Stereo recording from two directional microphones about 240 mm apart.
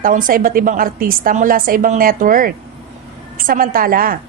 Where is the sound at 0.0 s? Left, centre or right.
Right.